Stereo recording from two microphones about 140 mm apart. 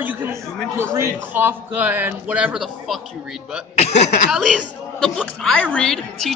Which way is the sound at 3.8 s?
55° left (ahead or behind).